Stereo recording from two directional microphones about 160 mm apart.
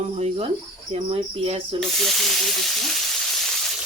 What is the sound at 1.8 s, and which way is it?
Frying, centre (ahead or behind).